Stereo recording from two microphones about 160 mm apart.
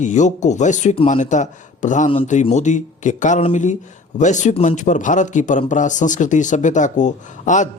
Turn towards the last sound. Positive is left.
turn(degrees=50)  # may be behind; listen again after turning